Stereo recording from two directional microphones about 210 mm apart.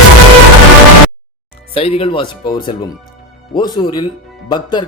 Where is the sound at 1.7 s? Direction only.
25° left (ahead or behind).